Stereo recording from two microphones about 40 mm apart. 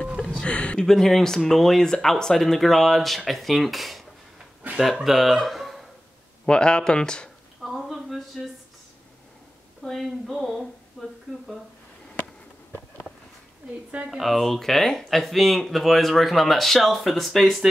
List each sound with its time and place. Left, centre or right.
0.4 s speech: left
0.9 s speech: centre
5.0 s speech: centre
6.4 s speech: left
7.6 s a woman's voice: centre
9.8 s speech: centre
14.2 s speech: centre